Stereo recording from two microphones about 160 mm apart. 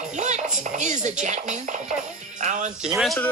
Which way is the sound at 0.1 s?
45° right (ahead or behind).